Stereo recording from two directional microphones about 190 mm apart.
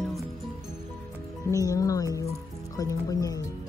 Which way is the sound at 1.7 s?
20° left (ahead or behind).